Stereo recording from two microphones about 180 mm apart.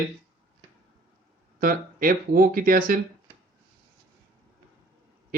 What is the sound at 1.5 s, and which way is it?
Speech, 50° right (ahead or behind).